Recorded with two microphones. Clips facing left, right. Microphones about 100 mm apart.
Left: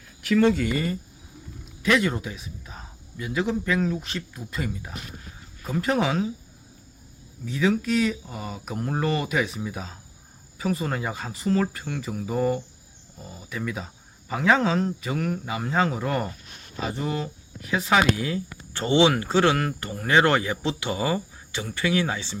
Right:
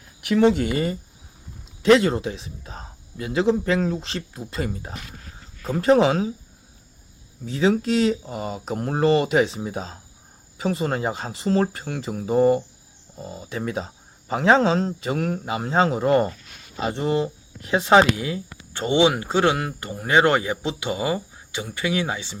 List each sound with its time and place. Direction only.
0.3 s speech: 20° right (ahead or behind)
1.8 s speech: 30° right (ahead or behind)
7.4 s speech: 35° right (ahead or behind); by 22.4 s 15° right (ahead or behind)